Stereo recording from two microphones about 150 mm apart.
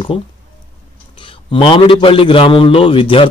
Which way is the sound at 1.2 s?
35° left (ahead or behind).